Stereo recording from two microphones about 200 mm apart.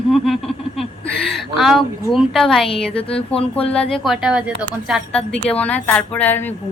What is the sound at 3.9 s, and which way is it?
A woman's voice, centre (ahead or behind).